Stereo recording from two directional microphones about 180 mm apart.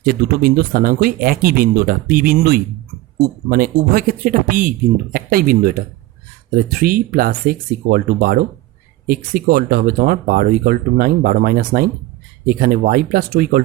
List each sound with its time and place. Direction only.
0.0 s speech: 55° right (ahead or behind)